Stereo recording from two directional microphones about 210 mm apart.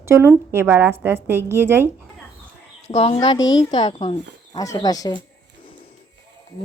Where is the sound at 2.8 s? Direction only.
30° left (ahead or behind).